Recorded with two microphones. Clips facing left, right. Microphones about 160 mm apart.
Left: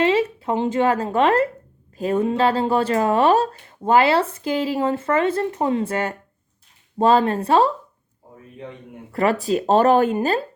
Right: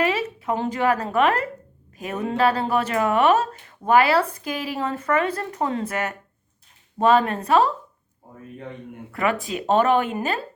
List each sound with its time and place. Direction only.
0.0 s a woman's voice: 30° left (ahead or behind)
9.1 s a woman's voice: 35° left (ahead or behind)